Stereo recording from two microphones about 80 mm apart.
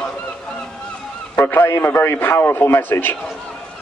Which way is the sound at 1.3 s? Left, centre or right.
Left.